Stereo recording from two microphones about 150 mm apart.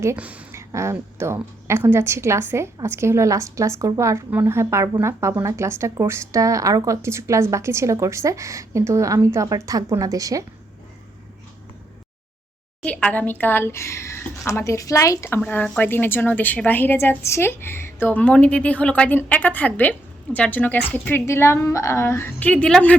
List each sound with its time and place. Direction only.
0.0 s a woman's voice: 15° right (ahead or behind)
12.8 s speech: 10° left (ahead or behind)